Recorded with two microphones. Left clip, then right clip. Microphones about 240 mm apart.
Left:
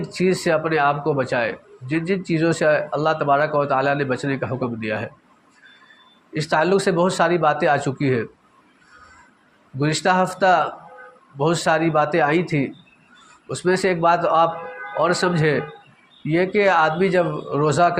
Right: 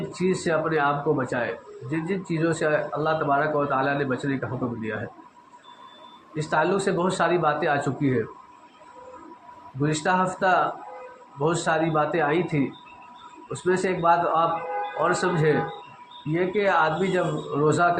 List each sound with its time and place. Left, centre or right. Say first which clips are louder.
0.1 s speech: left 6 dB; left
6.3 s speech: left 5 dB; left
9.8 s speech: left 4 dB; left